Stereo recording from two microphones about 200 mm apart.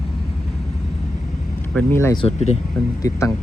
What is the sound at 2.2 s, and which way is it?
Speech, 35° left (ahead or behind).